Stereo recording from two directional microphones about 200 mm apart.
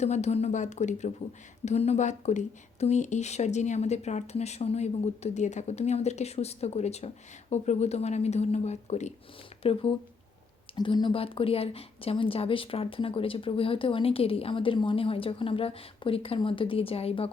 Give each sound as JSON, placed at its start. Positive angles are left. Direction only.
{"t": 0.0, "sound": "speech", "side_deg": 35}